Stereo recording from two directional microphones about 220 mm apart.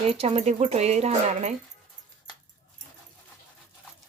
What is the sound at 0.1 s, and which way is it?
Speech, 30° right (ahead or behind).